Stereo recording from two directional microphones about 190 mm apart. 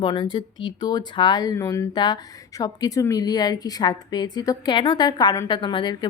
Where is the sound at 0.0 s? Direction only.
25° left (ahead or behind).